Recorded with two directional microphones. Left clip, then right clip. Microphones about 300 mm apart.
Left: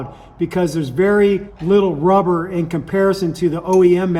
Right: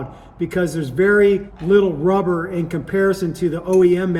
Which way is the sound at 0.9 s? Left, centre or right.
Left.